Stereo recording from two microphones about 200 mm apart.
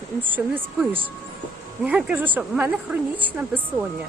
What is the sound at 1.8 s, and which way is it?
Speech, 5° right (ahead or behind).